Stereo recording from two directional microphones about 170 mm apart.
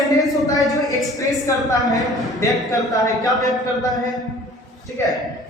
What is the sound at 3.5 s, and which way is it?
Speech, centre (ahead or behind).